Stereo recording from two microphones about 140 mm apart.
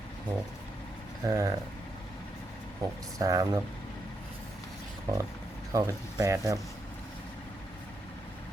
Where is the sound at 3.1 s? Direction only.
25° right (ahead or behind).